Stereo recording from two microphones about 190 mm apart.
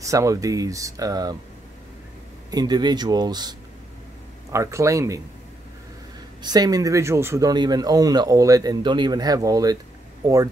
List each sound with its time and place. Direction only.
0.0 s speech: 15° right (ahead or behind)
2.5 s speech: 20° right (ahead or behind)
6.4 s speech: 20° right (ahead or behind)